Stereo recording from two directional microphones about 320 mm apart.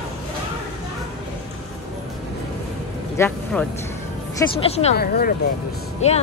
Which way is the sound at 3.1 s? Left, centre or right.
Centre.